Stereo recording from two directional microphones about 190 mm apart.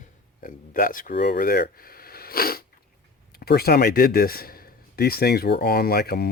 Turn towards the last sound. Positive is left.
turn(degrees=55)  # may be behind; listen again after turning